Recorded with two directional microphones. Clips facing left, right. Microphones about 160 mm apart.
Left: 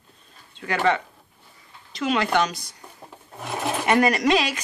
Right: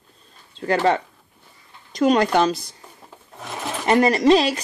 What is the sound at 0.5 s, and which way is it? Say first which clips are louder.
A woman's voice: right 3 dB; 35° right (ahead or behind).